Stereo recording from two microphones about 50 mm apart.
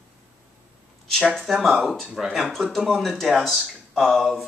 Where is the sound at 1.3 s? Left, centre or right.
Centre.